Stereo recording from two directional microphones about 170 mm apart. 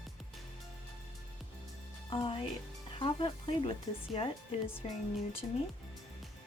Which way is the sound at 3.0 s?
30° left (ahead or behind).